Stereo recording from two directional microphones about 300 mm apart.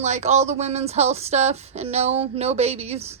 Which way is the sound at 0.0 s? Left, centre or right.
Right.